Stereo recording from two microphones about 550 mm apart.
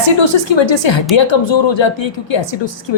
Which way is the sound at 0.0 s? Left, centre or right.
Left.